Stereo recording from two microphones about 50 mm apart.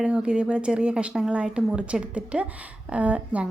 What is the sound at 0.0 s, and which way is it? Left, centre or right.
A woman's voice, centre.